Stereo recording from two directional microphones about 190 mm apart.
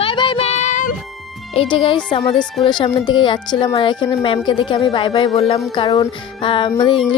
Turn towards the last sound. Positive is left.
turn(degrees=25)  # may be behind; listen again after turning